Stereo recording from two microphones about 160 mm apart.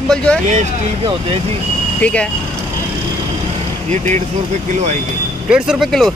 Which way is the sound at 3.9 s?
45° right (ahead or behind).